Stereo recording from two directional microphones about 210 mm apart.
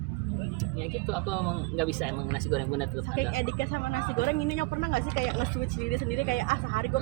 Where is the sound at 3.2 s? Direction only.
45° left (ahead or behind).